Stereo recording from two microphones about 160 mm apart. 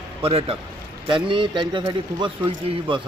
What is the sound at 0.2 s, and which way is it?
A man's voice, 35° right (ahead or behind).